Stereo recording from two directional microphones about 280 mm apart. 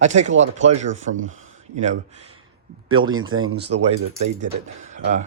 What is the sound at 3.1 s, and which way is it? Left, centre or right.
Speech, right.